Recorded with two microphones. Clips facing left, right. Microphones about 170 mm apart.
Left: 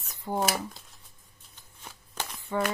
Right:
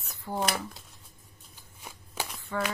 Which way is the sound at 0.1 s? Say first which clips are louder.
Left 3 dB; 20° left (ahead or behind).